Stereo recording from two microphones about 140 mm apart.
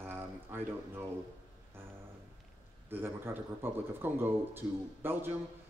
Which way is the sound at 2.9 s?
15° right (ahead or behind).